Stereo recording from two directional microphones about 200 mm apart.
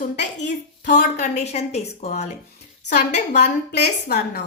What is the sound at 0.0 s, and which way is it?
A woman's voice, 35° left (ahead or behind).